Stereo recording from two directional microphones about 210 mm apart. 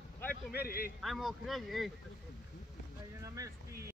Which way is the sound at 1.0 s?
Centre (ahead or behind).